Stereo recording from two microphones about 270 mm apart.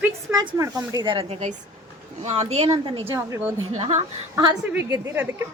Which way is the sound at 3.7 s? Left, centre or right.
Right.